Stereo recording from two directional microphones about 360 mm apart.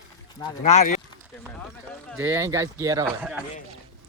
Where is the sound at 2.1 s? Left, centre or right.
Centre.